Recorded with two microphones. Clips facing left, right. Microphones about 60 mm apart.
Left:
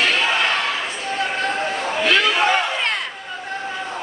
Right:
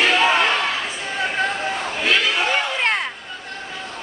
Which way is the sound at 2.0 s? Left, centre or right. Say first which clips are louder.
Left 3 dB; centre.